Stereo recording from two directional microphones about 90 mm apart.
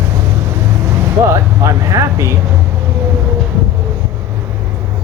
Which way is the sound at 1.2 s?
30° right (ahead or behind).